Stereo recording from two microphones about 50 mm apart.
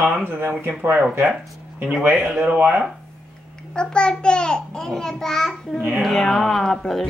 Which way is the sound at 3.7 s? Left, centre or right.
Centre.